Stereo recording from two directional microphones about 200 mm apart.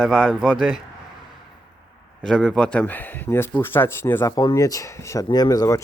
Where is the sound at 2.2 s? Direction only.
5° left (ahead or behind).